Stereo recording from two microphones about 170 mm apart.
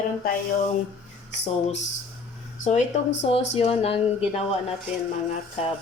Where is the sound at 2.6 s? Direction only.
45° left (ahead or behind).